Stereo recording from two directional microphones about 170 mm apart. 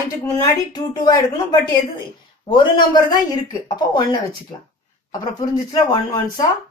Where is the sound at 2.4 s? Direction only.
30° left (ahead or behind).